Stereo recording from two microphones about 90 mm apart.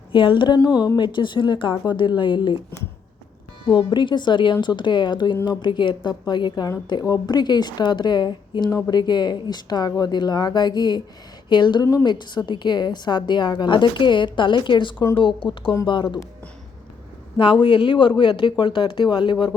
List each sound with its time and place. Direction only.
0.1 s a woman's voice: 65° left (ahead or behind)
0.9 s a woman's voice: 65° left (ahead or behind)
3.7 s a woman's voice: 60° left (ahead or behind)
17.3 s a woman's voice: 60° left (ahead or behind)